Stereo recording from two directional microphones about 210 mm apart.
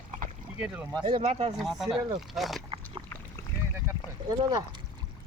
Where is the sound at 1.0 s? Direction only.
20° right (ahead or behind).